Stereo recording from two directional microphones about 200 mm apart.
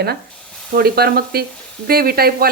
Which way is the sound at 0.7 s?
50° right (ahead or behind).